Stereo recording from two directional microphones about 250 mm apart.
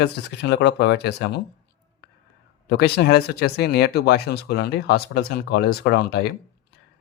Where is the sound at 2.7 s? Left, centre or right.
Left.